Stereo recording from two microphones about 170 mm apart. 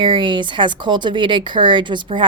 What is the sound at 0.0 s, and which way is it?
Speech, 30° right (ahead or behind).